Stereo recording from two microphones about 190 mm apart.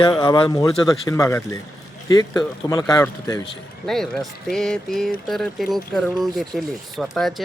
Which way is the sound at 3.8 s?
Centre (ahead or behind).